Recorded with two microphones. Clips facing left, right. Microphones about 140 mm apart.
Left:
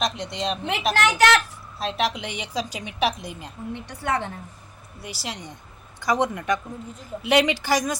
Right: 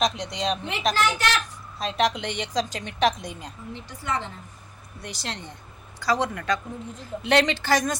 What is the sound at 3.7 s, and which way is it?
Speech, 65° left (ahead or behind).